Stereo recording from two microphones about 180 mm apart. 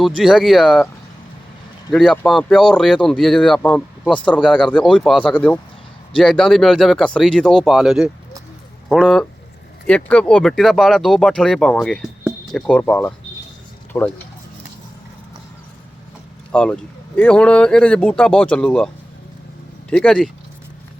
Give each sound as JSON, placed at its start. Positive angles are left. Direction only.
{"t": 0.2, "sound": "speech", "side_deg": 0}
{"t": 1.9, "sound": "speech", "side_deg": 0}
{"t": 4.1, "sound": "speech", "side_deg": 25}
{"t": 4.4, "sound": "speech", "side_deg": 5}
{"t": 16.5, "sound": "speech", "side_deg": 5}
{"t": 19.9, "sound": "speech", "side_deg": 5}